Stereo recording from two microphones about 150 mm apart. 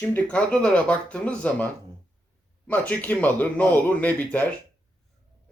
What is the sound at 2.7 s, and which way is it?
Speech, 10° left (ahead or behind).